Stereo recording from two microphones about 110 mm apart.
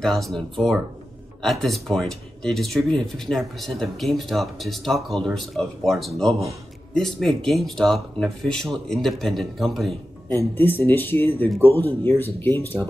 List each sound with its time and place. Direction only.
0.0 s speech: centre (ahead or behind)
10.3 s speech: 20° left (ahead or behind)